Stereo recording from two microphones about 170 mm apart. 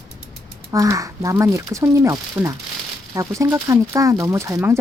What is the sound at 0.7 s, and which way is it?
Speech, 20° right (ahead or behind).